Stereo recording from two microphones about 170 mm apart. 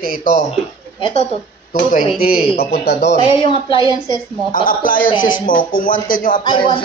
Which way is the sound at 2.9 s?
85° left.